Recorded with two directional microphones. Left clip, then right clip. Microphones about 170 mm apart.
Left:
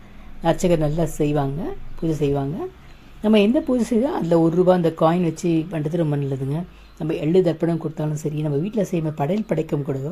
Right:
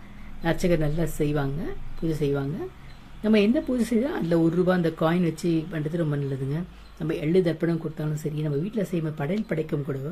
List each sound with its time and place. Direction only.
0.4 s speech: 20° left (ahead or behind)